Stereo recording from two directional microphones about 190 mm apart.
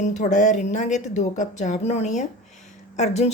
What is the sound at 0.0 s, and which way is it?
Speech, 40° left (ahead or behind).